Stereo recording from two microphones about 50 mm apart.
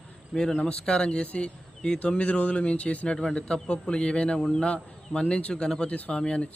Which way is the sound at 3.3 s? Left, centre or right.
Centre.